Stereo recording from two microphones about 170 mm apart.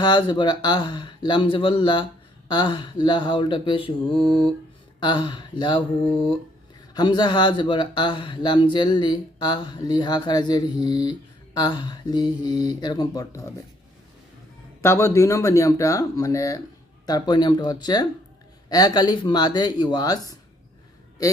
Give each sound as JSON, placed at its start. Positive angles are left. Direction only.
{"t": 0.0, "sound": "speech", "side_deg": 25}
{"t": 4.1, "sound": "mantra", "side_deg": 0}
{"t": 4.9, "sound": "speech", "side_deg": 25}
{"t": 6.9, "sound": "speech", "side_deg": 25}
{"t": 14.8, "sound": "speech", "side_deg": 15}